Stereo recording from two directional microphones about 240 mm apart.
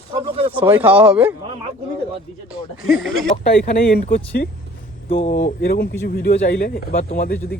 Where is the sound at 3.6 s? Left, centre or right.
Left.